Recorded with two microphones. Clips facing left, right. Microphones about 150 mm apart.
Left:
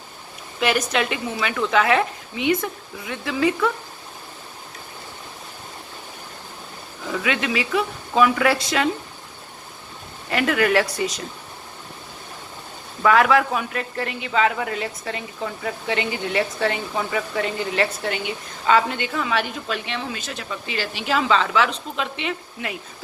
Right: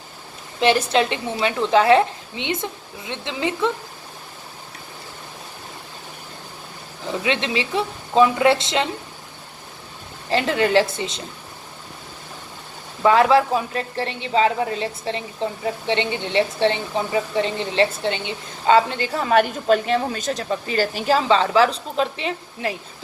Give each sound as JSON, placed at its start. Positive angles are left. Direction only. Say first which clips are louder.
{"t": 0.6, "sound": "a woman's voice", "louder": "right 4 dB", "side_deg": -30}
{"t": 7.1, "sound": "a woman's voice", "louder": "right 1 dB", "side_deg": -25}
{"t": 10.2, "sound": "a woman's voice", "louder": "even", "side_deg": -25}
{"t": 13.0, "sound": "a woman's voice", "louder": "right 2 dB", "side_deg": -30}